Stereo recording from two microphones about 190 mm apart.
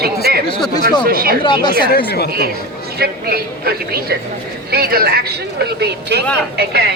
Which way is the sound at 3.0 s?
55° right (ahead or behind).